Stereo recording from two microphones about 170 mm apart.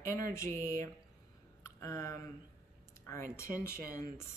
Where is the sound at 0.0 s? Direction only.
15° left (ahead or behind).